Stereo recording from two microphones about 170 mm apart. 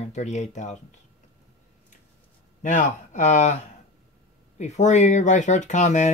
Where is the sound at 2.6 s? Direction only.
45° left (ahead or behind).